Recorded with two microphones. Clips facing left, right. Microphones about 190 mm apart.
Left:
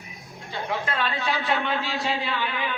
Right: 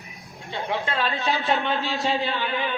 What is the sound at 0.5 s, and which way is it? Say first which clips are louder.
A man's voice: right 2 dB; 25° right (ahead or behind).